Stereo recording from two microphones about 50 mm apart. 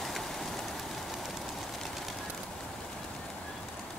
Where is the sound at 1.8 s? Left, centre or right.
Centre.